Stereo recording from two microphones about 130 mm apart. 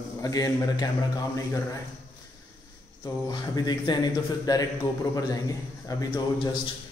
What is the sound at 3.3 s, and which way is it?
A man's voice, 35° left (ahead or behind).